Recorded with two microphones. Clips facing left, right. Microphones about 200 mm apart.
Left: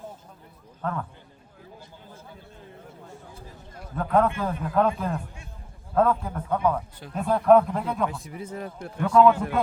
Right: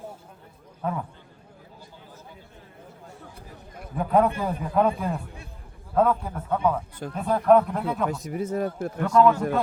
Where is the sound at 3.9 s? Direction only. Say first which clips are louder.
Right 1 dB; 10° right (ahead or behind).